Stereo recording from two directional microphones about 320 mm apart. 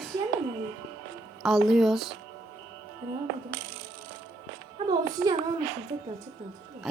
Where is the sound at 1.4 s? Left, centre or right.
Centre.